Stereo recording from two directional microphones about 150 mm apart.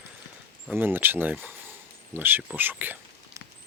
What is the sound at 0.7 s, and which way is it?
Speech, 15° right (ahead or behind).